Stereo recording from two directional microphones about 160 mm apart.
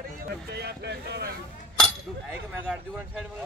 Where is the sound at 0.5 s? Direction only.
90° right.